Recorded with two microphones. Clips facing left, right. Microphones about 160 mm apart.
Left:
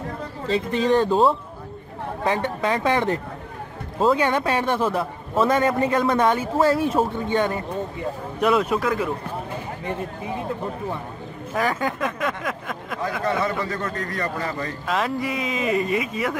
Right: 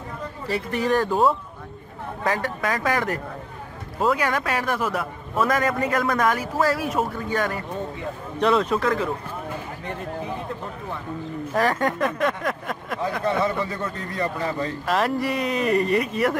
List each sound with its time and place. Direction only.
0.5 s a man's voice: 20° left (ahead or behind)
8.4 s speech: 10° left (ahead or behind)
11.5 s speech: centre (ahead or behind)
14.1 s a man's voice: 20° right (ahead or behind)
14.9 s speech: centre (ahead or behind)